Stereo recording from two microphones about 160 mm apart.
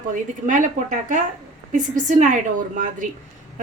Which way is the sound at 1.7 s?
50° right (ahead or behind).